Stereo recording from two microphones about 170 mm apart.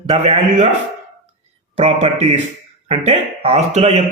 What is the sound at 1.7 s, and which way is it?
Speech, 40° right (ahead or behind).